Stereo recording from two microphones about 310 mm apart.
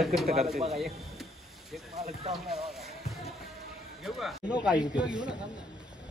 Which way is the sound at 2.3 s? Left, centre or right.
Centre.